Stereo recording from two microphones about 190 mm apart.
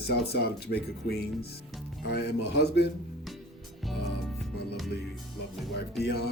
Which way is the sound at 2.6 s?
60° left (ahead or behind).